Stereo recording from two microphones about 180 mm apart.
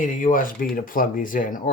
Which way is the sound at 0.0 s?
45° left (ahead or behind).